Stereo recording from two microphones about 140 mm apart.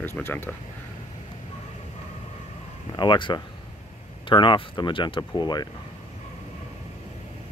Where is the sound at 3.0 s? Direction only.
35° left (ahead or behind).